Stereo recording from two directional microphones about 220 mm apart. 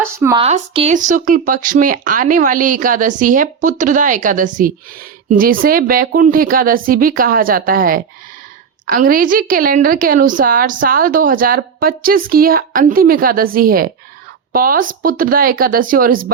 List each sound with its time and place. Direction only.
0.0 s speech: 10° right (ahead or behind)
0.3 s speech: 25° right (ahead or behind)